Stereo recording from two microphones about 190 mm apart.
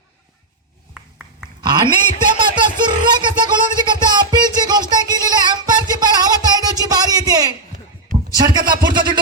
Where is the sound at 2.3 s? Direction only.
25° right (ahead or behind).